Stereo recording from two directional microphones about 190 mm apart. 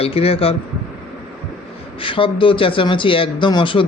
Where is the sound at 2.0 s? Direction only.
25° left (ahead or behind).